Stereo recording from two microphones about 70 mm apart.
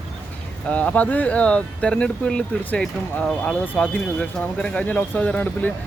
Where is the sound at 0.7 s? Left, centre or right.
Left.